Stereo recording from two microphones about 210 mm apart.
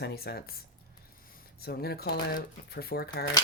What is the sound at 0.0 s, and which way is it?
Speech, 50° left (ahead or behind).